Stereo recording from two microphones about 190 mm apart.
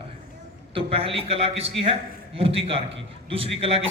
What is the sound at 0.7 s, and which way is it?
A man's voice, 30° right (ahead or behind).